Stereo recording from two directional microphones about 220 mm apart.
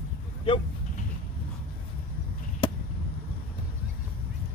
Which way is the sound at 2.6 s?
25° left (ahead or behind).